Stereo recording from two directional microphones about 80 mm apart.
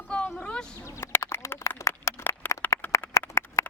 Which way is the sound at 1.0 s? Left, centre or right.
Left.